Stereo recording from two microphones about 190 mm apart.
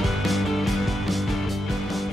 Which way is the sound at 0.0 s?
Centre (ahead or behind).